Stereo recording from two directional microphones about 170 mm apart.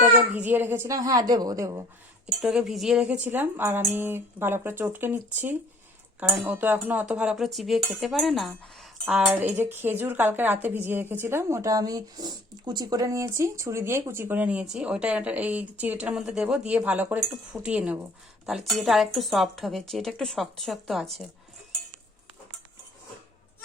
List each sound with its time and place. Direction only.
0.3 s a woman's voice: 10° right (ahead or behind)
2.2 s a woman's voice: 5° right (ahead or behind)